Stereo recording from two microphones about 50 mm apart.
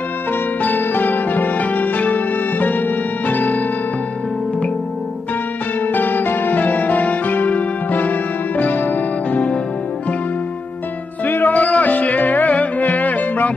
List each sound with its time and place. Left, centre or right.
0.6 s music: left
5.9 s music: left
11.2 s music: left